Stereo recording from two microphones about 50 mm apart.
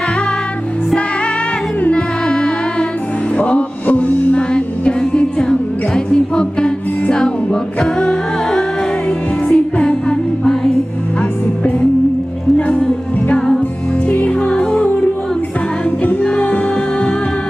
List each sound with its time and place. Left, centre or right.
1.9 s music: left
14.0 s music: left
16.2 s music: left